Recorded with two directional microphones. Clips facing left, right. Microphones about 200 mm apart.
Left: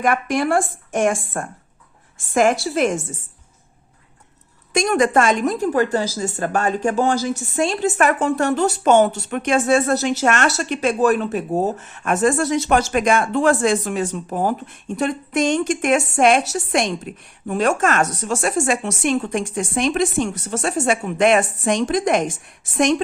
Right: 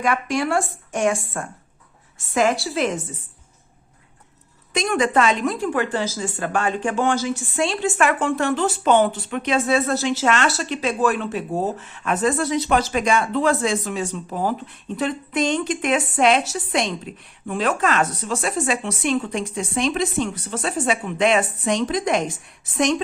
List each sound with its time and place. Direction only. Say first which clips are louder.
0.0 s a woman's voice: left 3 dB; 50° left (ahead or behind)
4.7 s a woman's voice: left 3 dB; 45° left (ahead or behind)